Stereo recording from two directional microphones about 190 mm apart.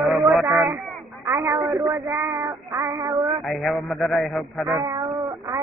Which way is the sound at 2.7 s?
Centre (ahead or behind).